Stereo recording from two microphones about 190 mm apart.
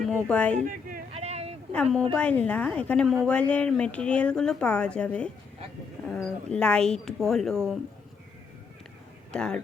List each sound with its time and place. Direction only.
0.0 s speech: 5° left (ahead or behind)
0.6 s speech: 45° right (ahead or behind)
1.1 s a sound: 35° right (ahead or behind)
1.7 s a woman's voice: centre (ahead or behind)
9.3 s speech: 5° left (ahead or behind)